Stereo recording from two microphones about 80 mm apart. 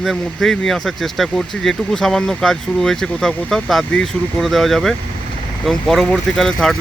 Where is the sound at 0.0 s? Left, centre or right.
Centre.